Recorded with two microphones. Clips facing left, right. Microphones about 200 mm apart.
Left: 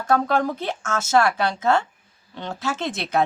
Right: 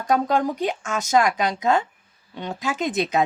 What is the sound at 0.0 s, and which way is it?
A woman's voice, 15° right (ahead or behind).